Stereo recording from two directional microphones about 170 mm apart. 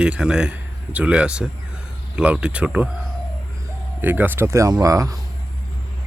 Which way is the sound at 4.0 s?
10° right (ahead or behind).